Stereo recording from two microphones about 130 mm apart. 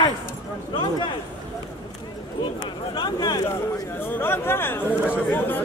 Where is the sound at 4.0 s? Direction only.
15° left (ahead or behind).